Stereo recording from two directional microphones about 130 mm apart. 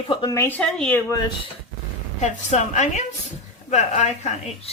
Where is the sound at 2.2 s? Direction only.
65° left (ahead or behind).